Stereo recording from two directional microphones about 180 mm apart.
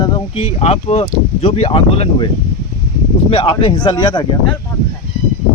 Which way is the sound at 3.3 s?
30° left (ahead or behind).